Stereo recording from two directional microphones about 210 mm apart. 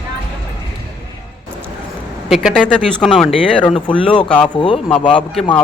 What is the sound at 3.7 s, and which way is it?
Speech, 25° left (ahead or behind).